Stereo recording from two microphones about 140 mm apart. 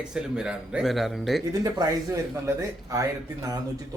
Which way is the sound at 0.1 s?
5° right (ahead or behind).